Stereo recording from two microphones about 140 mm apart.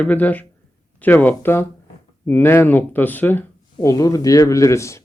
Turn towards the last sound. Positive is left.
turn(degrees=20)  # may be behind; listen again after turning